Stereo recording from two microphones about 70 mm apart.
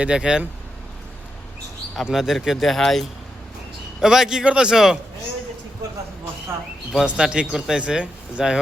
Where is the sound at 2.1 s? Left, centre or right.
Centre.